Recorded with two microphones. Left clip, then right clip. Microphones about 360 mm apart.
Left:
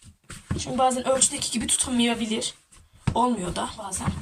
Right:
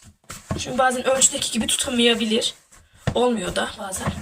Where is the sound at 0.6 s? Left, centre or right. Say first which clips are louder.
Right 3 dB; centre.